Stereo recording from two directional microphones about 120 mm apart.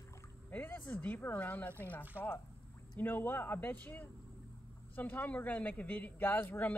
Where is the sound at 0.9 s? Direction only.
15° left (ahead or behind).